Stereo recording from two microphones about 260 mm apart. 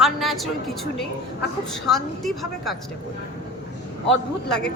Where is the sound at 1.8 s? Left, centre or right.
Centre.